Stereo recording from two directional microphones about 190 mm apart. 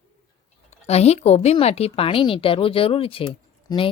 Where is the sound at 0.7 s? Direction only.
35° left (ahead or behind).